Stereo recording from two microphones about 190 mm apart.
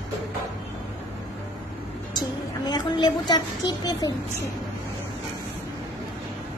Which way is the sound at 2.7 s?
20° left (ahead or behind).